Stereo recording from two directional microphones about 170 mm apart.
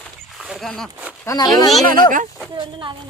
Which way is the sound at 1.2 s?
20° left (ahead or behind).